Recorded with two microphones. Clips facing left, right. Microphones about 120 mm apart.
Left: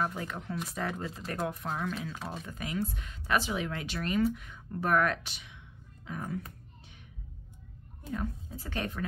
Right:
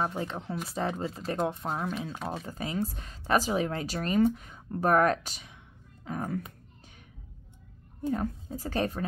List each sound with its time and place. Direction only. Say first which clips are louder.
0.0 s speech: right 2 dB; 30° right (ahead or behind); by 6.4 s 45° right (ahead or behind)
8.1 s speech: right 5 dB; 40° right (ahead or behind)